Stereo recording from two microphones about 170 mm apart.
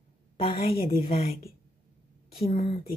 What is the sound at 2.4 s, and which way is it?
Speech, 35° left (ahead or behind).